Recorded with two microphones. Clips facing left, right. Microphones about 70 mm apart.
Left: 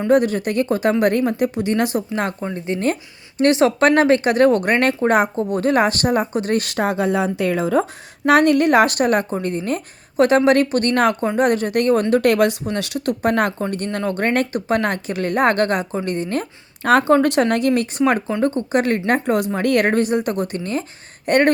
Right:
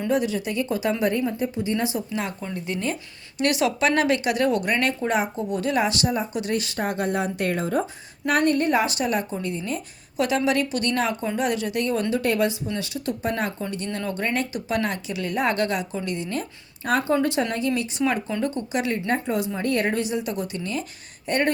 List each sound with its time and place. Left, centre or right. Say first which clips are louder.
0.1 s a woman's voice: left 8 dB; left
2.4 s speech: left 7 dB; left
8.3 s speech: left 7 dB; left
12.1 s speech: left 7 dB; left
16.8 s speech: left 8 dB; left
17.2 s a woman's voice: left 7 dB; left
21.2 s a sound: left 8 dB; left